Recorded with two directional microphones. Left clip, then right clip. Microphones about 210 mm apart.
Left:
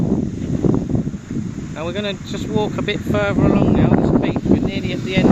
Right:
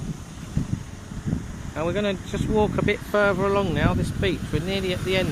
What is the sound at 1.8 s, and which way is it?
Speech, 5° left (ahead or behind).